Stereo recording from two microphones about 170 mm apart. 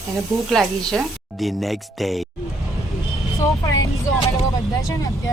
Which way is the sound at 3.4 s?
20° left (ahead or behind).